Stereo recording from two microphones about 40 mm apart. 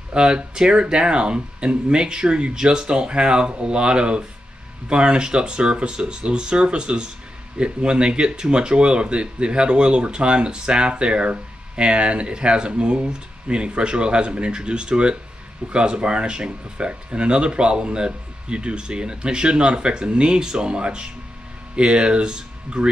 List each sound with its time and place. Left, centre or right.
0.1 s speech: right